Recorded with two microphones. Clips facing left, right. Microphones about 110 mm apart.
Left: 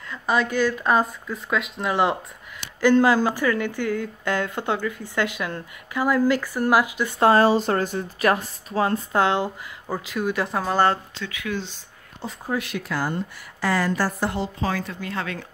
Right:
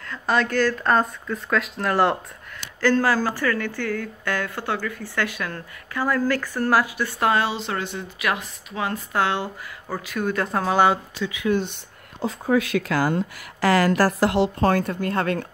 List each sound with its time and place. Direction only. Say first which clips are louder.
0.1 s speech: right 1 dB; 5° left (ahead or behind)
2.8 s speech: left 3 dB; 15° left (ahead or behind)
7.2 s speech: left 6 dB; 35° left (ahead or behind)
9.9 s speech: even; 10° left (ahead or behind); by 11.2 s 5° right (ahead or behind)
11.2 s speech: right 7 dB; 20° right (ahead or behind)
11.5 s a woman's voice: right 6 dB; 55° right (ahead or behind)
12.4 s a woman's voice: right 6 dB; 90° right; by 15.4 s 50° right (ahead or behind)